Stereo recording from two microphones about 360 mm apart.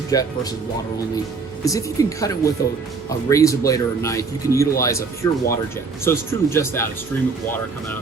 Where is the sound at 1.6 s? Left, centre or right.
Centre.